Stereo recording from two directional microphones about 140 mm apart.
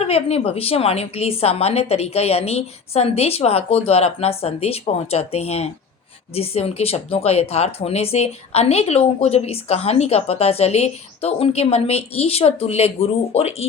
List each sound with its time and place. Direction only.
0.0 s speech: 50° left (ahead or behind)